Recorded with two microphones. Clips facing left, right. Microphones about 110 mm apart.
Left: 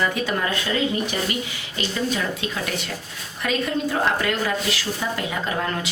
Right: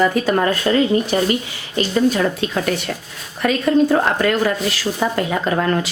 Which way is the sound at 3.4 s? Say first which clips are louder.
Right 9 dB; 50° right (ahead or behind).